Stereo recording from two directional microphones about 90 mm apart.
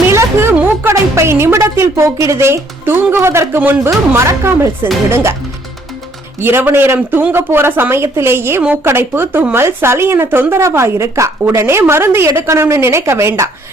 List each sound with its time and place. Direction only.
0.1 s a sound: 30° right (ahead or behind)
0.5 s music: 20° right (ahead or behind)
1.6 s speech: 25° right (ahead or behind)
6.4 s speech: 25° right (ahead or behind)